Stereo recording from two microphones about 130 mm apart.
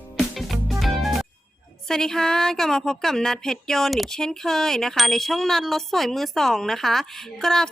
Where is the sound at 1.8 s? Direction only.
5° left (ahead or behind).